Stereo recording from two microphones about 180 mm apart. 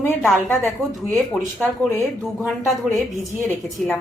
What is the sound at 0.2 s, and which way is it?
A woman's voice, centre (ahead or behind).